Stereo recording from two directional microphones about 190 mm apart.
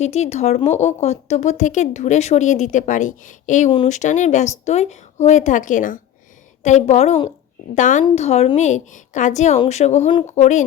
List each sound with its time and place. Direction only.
0.0 s speech: 35° left (ahead or behind)